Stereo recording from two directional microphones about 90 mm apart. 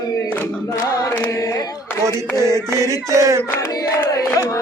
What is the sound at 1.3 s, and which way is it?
Chant, 40° left (ahead or behind).